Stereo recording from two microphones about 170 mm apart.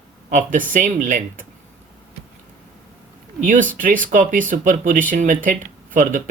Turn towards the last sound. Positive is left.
turn(degrees=-50)  # may be behind; listen again after turning